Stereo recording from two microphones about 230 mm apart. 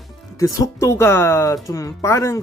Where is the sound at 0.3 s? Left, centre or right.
Centre.